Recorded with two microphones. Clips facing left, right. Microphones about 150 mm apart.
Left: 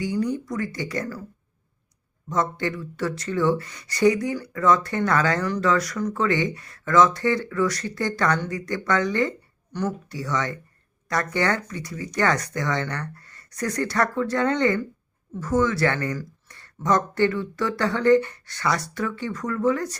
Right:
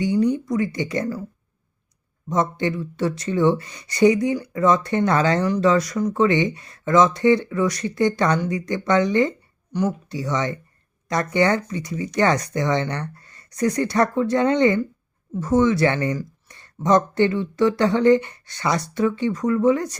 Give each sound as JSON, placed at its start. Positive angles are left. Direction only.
{"t": 0.0, "sound": "speech", "side_deg": -20}
{"t": 2.3, "sound": "speech", "side_deg": -20}